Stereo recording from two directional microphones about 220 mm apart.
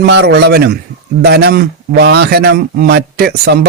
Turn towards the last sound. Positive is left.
turn(degrees=-45)  # may be behind; listen again after turning